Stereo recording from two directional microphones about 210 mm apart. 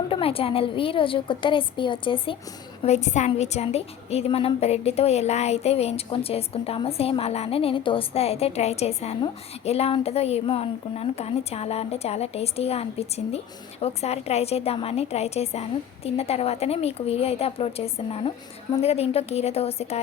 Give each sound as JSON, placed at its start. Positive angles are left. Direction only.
{"t": 0.1, "sound": "a woman's voice", "side_deg": 25}